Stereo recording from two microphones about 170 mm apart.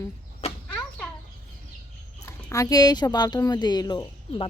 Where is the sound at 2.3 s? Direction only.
20° left (ahead or behind).